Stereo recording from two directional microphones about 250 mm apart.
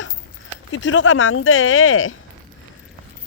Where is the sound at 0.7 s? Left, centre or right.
Left.